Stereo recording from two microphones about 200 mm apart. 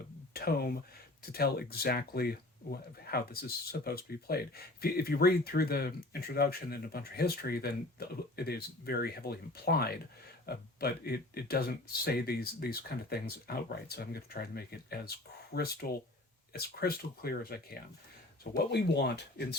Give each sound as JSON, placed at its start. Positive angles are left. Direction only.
{"t": 0.3, "sound": "speech", "side_deg": 50}